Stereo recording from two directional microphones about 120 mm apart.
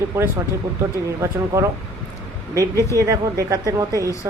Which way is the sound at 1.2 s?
25° right (ahead or behind).